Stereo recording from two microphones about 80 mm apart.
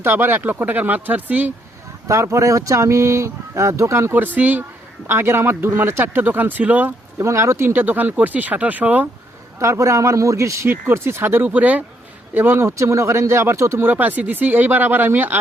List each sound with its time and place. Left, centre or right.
0.0 s speech: right
2.0 s speech: right
7.2 s speech: right
9.6 s speech: right